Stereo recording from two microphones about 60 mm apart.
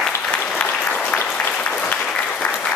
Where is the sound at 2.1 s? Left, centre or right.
Centre.